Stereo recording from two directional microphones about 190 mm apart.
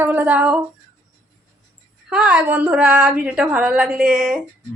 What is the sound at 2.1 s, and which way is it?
A woman's voice, 5° right (ahead or behind).